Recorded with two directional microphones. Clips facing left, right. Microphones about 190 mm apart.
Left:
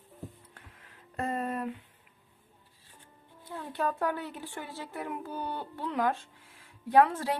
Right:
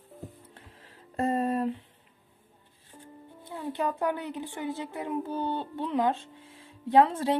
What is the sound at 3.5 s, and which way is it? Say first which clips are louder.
A woman's voice: right 2 dB; 20° right (ahead or behind).